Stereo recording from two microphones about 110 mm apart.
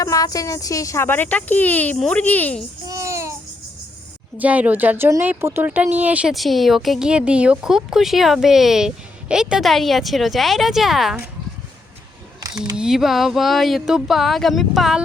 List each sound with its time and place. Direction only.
0.0 s a woman's voice: 30° left (ahead or behind); by 2.6 s 15° left (ahead or behind)
2.8 s babbling: 30° right (ahead or behind)
4.4 s speech: 15° right (ahead or behind)
6.3 s speech: centre (ahead or behind)
12.7 s speech: 5° right (ahead or behind)